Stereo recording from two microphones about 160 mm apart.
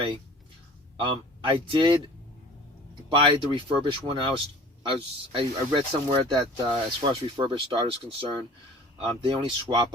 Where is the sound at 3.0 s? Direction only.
35° right (ahead or behind).